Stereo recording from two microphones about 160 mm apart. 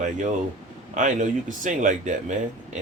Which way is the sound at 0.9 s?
50° right (ahead or behind).